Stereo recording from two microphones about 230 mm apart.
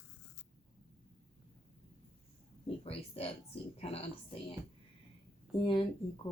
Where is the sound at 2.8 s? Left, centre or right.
Left.